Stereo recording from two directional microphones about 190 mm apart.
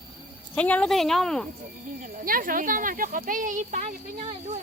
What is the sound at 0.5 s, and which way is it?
Speech, 10° left (ahead or behind).